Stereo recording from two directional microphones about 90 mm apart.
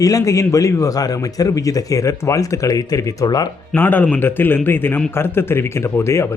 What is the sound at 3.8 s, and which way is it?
A man's voice, 20° left (ahead or behind).